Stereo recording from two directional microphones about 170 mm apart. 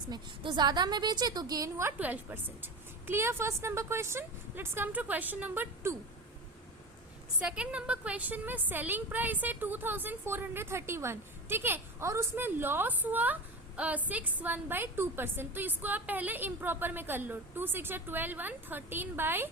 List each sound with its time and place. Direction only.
0.1 s a woman's voice: 25° right (ahead or behind)
2.0 s a woman's voice: 10° right (ahead or behind)
7.3 s a woman's voice: 5° right (ahead or behind)